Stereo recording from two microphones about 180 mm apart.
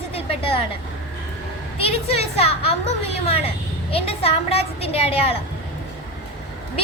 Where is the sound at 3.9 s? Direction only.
35° left (ahead or behind).